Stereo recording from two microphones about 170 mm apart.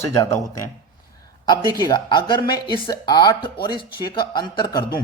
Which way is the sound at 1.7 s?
25° left (ahead or behind).